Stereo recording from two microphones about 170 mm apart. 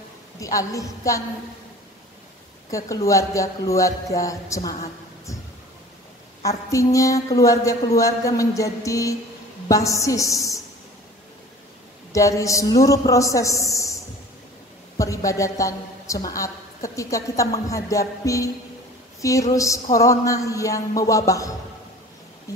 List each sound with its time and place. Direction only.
0.4 s a woman's voice: 20° left (ahead or behind)
2.7 s a woman's voice: 20° left (ahead or behind)
6.4 s a woman's voice: 20° left (ahead or behind)
12.1 s a woman's voice: 20° left (ahead or behind)
15.0 s a woman's voice: 20° left (ahead or behind)